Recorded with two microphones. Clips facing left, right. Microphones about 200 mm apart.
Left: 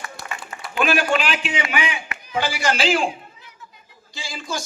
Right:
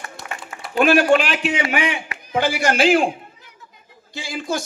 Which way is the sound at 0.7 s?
55° right (ahead or behind).